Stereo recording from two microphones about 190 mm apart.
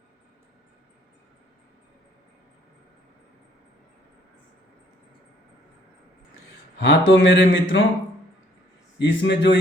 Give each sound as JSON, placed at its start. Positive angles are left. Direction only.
{"t": 6.7, "sound": "speech", "side_deg": 70}
{"t": 9.0, "sound": "speech", "side_deg": 65}